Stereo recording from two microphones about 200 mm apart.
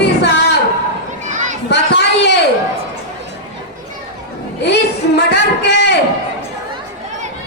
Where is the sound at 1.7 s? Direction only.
55° left (ahead or behind).